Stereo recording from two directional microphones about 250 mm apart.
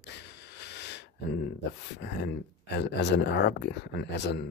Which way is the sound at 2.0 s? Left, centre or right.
Left.